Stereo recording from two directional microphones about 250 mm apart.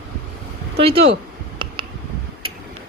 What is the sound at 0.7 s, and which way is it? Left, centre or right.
Speech, right.